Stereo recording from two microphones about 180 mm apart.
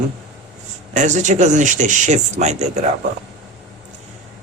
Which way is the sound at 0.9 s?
40° right (ahead or behind).